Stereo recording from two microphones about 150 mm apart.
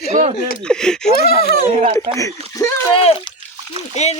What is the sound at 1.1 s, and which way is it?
Speech, 90° left.